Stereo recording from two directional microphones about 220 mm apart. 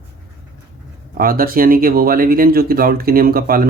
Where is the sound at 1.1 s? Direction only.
40° right (ahead or behind).